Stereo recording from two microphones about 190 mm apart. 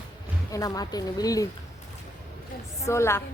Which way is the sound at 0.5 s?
20° left (ahead or behind).